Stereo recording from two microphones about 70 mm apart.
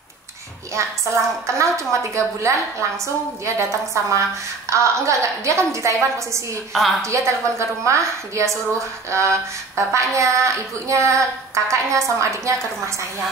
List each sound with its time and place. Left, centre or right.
0.7 s speech: right